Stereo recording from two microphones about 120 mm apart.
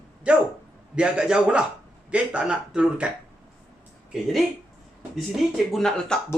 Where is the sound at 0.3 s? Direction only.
10° right (ahead or behind).